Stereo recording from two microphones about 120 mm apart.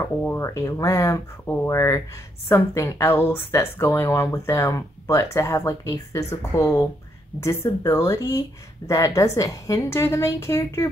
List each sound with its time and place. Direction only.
0.0 s speech: 20° left (ahead or behind)